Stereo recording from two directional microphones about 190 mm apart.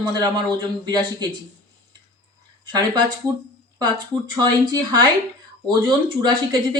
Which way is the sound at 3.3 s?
15° right (ahead or behind).